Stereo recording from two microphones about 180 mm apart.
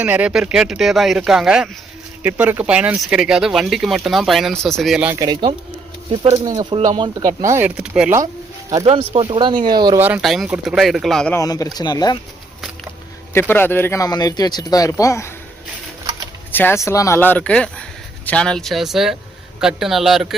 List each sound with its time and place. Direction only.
0.0 s speech: 10° right (ahead or behind)
5.2 s speech: 25° right (ahead or behind)
7.5 s speech: 10° right (ahead or behind)
8.8 s speech: 35° right (ahead or behind)
10.0 s speech: 5° right (ahead or behind)
11.3 s speech: 20° left (ahead or behind)
13.5 s speech: 10° left (ahead or behind)
16.5 s speech: 10° left (ahead or behind)